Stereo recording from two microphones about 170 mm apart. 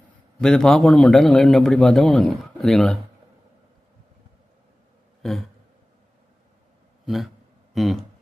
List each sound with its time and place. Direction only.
0.4 s a man's voice: 5° left (ahead or behind)
7.0 s a man's voice: centre (ahead or behind)